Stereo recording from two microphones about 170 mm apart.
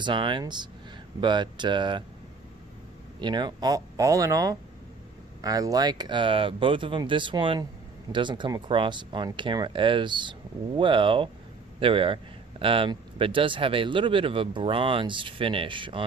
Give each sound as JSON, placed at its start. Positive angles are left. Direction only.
{"t": 0.0, "sound": "speech", "side_deg": -30}
{"t": 3.2, "sound": "speech", "side_deg": -25}